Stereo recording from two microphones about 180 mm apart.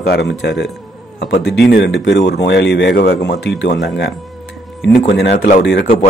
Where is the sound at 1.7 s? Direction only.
70° left (ahead or behind).